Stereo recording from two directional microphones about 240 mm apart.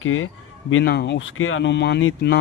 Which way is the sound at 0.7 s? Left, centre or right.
Left.